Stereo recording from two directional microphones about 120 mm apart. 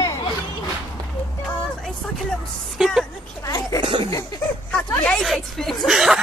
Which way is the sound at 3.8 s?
40° right (ahead or behind).